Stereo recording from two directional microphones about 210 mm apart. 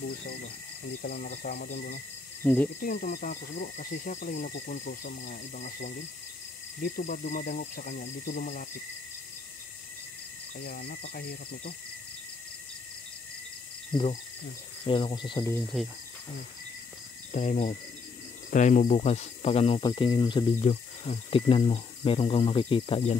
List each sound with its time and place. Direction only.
1.0 s speech: 50° left (ahead or behind)
2.4 s speech: 10° left (ahead or behind)
2.8 s speech: 40° left (ahead or behind)
4.5 s speech: 50° left (ahead or behind)
4.7 s speech: 35° left (ahead or behind)
6.8 s speech: 35° left (ahead or behind)
10.7 s speech: 45° left (ahead or behind)
13.9 s speech: 25° left (ahead or behind)
17.3 s speech: 35° left (ahead or behind)